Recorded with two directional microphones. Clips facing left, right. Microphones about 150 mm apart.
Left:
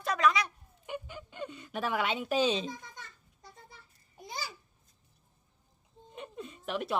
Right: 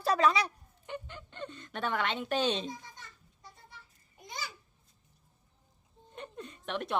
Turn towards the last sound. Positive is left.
turn(degrees=5)  # may be behind; listen again after turning